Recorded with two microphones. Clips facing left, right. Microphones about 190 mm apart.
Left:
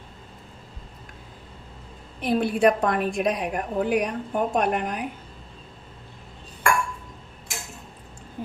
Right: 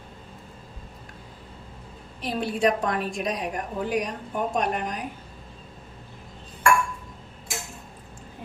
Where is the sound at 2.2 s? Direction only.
55° left (ahead or behind).